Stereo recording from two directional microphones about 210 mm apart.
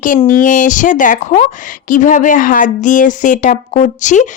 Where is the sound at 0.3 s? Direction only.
40° left (ahead or behind).